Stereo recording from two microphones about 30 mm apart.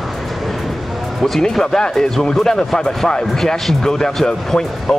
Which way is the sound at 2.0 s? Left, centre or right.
Left.